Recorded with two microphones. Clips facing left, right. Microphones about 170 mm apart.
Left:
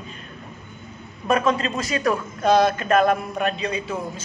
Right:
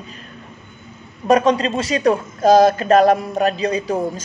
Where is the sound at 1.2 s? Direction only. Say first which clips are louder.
Right 6 dB; 35° right (ahead or behind).